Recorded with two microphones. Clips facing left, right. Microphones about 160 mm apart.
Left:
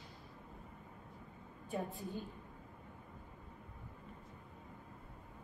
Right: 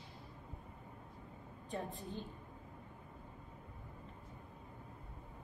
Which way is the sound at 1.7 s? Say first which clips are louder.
Left 2 dB; 10° left (ahead or behind).